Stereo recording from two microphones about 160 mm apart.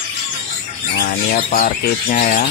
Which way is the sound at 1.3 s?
50° left (ahead or behind).